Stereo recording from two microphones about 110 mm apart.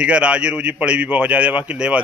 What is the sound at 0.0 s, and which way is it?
Speech, 10° right (ahead or behind).